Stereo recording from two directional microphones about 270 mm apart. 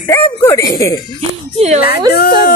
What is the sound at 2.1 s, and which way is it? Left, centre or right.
Speech, left.